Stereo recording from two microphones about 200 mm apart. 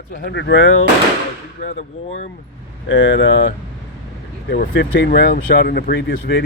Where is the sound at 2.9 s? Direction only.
65° left (ahead or behind).